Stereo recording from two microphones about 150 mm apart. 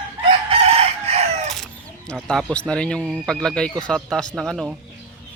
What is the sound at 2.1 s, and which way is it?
Speech, 5° left (ahead or behind).